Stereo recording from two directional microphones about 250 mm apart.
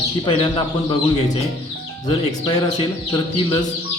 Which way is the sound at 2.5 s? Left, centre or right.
Centre.